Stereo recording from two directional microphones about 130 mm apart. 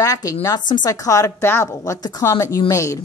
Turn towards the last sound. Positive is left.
turn(degrees=25)  # may be behind; listen again after turning